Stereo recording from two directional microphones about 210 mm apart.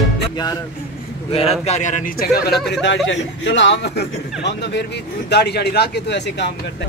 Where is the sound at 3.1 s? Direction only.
60° left (ahead or behind).